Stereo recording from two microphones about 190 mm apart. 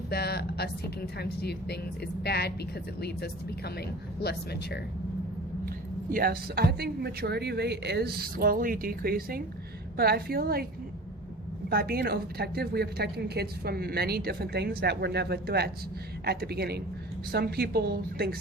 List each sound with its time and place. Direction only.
0.1 s a woman's voice: 55° left (ahead or behind)
4.2 s speech: 55° left (ahead or behind)
5.6 s speech: 50° right (ahead or behind)
11.7 s a woman's voice: 55° right (ahead or behind)